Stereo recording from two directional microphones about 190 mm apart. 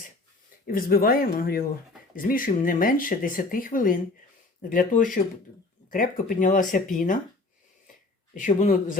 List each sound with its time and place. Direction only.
0.7 s speech: 50° left (ahead or behind)
8.3 s speech: 45° left (ahead or behind)